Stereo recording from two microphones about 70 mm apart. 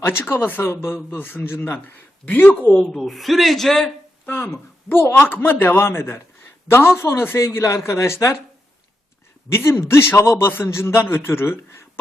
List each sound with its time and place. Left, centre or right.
0.0 s speech: left
2.7 s speech: centre
4.3 s speech: left
9.5 s speech: left